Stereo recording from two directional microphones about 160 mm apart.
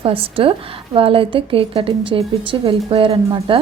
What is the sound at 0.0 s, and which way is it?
A woman's voice, 35° right (ahead or behind).